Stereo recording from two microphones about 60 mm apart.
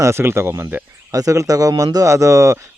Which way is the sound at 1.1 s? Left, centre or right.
Right.